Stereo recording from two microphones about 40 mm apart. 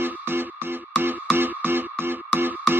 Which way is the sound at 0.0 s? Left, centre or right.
Right.